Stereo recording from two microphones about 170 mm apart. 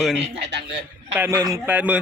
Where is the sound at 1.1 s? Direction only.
15° right (ahead or behind).